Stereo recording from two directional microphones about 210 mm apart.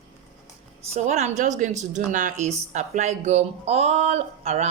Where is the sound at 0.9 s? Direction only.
30° right (ahead or behind).